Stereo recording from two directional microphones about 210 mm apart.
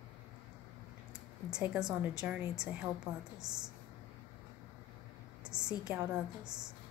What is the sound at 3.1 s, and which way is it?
Speech, 15° right (ahead or behind).